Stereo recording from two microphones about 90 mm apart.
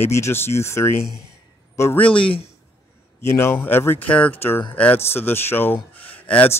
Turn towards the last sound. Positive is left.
turn(degrees=15)  # may be behind; listen again after turning